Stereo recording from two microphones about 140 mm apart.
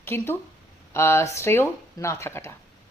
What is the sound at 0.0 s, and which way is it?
Speech, 15° left (ahead or behind).